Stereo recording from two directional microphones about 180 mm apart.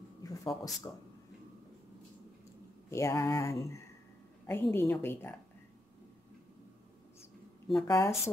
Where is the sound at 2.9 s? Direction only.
15° left (ahead or behind).